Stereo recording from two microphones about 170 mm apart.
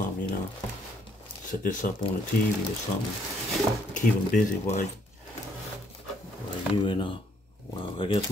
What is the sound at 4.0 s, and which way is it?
Speech, 45° left (ahead or behind).